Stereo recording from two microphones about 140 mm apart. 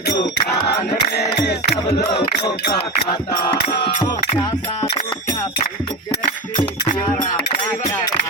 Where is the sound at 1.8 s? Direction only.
45° left (ahead or behind).